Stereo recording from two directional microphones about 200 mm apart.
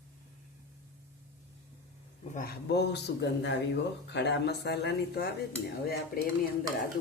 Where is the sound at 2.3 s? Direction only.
50° left (ahead or behind).